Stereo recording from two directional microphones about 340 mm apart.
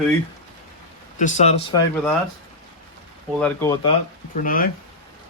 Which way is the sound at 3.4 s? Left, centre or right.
Centre.